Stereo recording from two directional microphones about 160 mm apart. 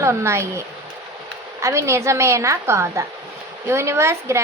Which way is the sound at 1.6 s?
20° right (ahead or behind).